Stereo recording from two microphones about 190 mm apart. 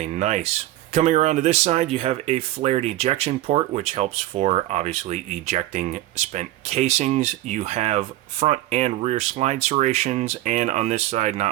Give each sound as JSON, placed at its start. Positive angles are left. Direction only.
{"t": 0.0, "sound": "speech", "side_deg": -35}